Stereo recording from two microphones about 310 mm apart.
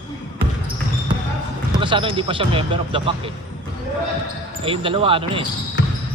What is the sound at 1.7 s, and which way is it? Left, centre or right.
A man's voice, centre.